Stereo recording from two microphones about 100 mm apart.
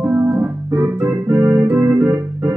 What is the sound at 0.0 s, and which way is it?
Organ, 20° right (ahead or behind).